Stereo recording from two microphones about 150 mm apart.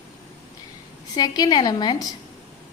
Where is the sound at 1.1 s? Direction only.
25° left (ahead or behind).